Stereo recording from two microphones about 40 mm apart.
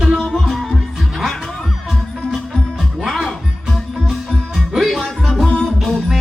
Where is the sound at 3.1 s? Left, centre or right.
Centre.